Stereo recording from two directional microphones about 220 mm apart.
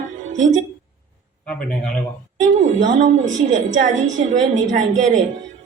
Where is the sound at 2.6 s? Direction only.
35° right (ahead or behind).